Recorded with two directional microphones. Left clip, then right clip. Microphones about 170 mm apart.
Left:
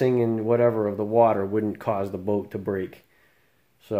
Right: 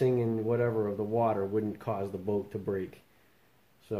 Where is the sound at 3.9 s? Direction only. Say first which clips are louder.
Left 9 dB; 55° left (ahead or behind).